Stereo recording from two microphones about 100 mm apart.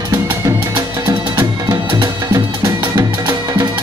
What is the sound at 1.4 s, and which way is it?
Music, 45° right (ahead or behind).